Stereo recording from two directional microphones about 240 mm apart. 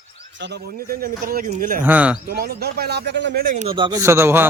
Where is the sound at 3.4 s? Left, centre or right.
Right; by 4.4 s centre.